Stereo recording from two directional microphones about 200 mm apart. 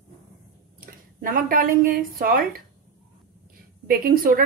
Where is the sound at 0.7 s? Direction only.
45° right (ahead or behind).